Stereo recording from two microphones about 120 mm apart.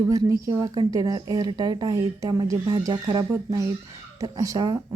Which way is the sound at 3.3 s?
25° right (ahead or behind).